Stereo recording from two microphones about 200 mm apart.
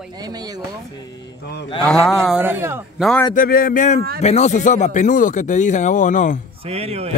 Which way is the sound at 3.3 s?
45° left (ahead or behind).